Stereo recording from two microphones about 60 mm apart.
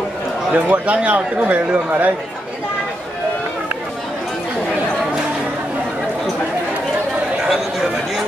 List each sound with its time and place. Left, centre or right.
0.5 s a man's voice: right
7.4 s chatter: centre